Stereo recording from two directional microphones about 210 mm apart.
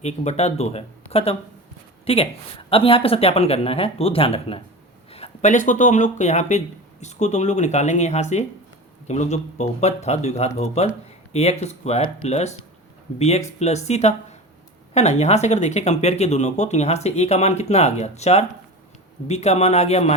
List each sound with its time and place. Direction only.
0.0 s speech: 30° left (ahead or behind)